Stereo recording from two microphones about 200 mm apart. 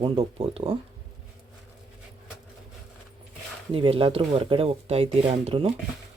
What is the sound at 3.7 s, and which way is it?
Speech, 25° right (ahead or behind).